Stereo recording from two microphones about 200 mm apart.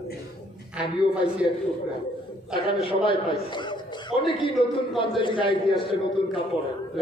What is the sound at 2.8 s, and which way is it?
Speech, 25° left (ahead or behind).